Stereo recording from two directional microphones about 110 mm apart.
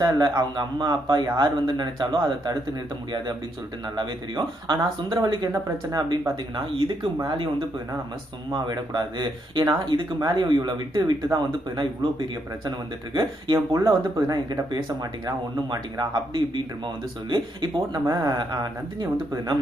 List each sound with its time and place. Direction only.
0.0 s speech: 40° right (ahead or behind)
3.8 s speech: 40° right (ahead or behind)
6.7 s speech: 50° right (ahead or behind)
8.5 s speech: 40° right (ahead or behind)
13.1 s speech: 35° right (ahead or behind)
18.0 s speech: 30° right (ahead or behind)